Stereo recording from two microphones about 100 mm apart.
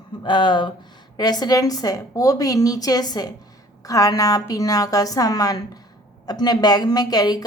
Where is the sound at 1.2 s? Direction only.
40° left (ahead or behind).